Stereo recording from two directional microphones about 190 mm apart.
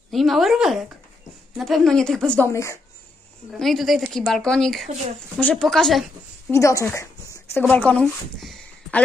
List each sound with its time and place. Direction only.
0.1 s speech: centre (ahead or behind)
3.5 s speech: centre (ahead or behind)
6.5 s a woman's voice: 15° left (ahead or behind)